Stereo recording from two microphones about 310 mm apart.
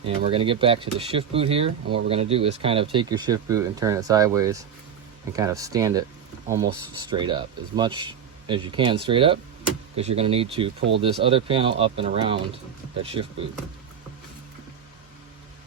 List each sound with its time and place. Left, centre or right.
0.2 s speech: centre
10.8 s speech: right
11.0 s speech: centre